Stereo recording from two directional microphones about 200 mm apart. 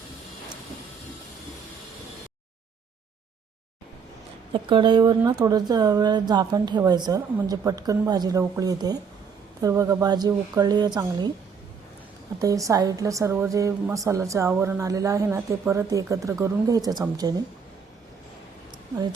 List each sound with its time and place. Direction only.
4.7 s speech: 20° right (ahead or behind)
12.4 s a woman's voice: 15° right (ahead or behind)